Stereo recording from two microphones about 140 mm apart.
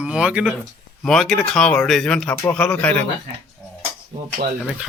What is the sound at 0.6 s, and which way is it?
Speech, 5° left (ahead or behind).